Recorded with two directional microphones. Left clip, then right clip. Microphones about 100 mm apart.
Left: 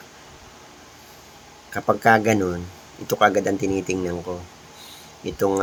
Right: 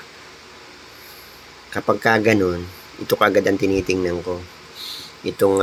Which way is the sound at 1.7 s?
25° right (ahead or behind).